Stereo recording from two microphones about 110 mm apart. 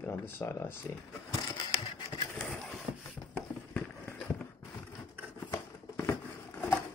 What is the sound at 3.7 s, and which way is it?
Run, 10° left (ahead or behind).